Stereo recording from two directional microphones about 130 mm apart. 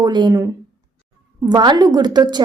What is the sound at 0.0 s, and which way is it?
Speech, 35° right (ahead or behind).